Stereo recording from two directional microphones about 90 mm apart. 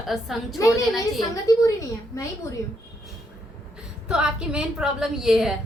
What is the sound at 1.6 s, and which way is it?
A woman's voice, 35° left (ahead or behind).